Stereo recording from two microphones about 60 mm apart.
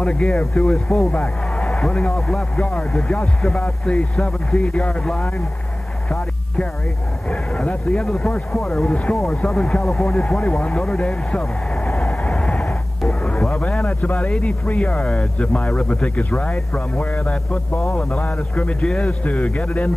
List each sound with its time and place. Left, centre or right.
0.0 s speech: centre
1.1 s speech: centre
7.2 s speech: centre
8.8 s speech: centre
11.9 s vehicle: centre
13.0 s a sound: centre
13.6 s speech: left